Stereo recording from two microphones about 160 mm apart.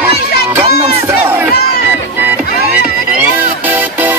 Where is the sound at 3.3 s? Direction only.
10° right (ahead or behind).